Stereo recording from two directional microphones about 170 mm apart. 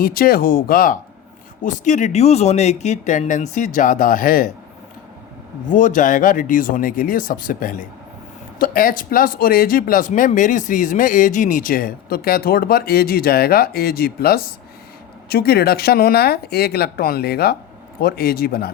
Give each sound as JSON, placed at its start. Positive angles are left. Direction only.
{"t": 0.0, "sound": "speech", "side_deg": 60}
{"t": 1.6, "sound": "speech", "side_deg": 45}
{"t": 5.6, "sound": "speech", "side_deg": 50}